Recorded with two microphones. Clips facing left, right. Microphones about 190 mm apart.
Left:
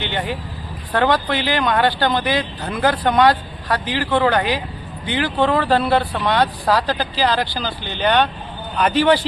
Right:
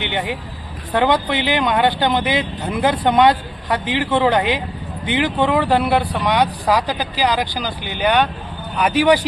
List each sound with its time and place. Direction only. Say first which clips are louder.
0.0 s speech: right 1 dB; 15° right (ahead or behind)